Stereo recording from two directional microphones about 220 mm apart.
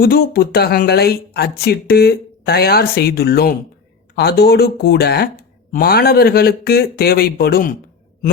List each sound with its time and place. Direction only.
0.0 s speech: 45° left (ahead or behind)